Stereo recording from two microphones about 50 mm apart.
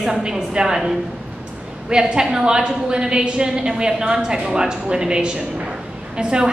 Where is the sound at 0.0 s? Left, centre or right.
Centre.